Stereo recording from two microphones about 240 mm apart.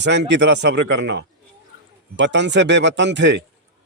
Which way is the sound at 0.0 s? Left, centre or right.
Right.